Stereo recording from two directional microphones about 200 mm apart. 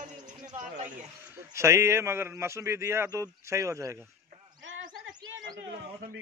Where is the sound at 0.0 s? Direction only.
35° right (ahead or behind).